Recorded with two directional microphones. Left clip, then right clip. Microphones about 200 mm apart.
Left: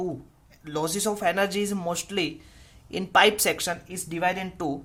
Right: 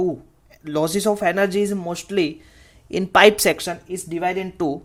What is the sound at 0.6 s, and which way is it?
Speech, 25° right (ahead or behind).